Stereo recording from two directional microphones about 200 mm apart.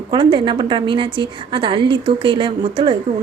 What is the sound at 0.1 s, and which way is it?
A woman's voice, 25° right (ahead or behind).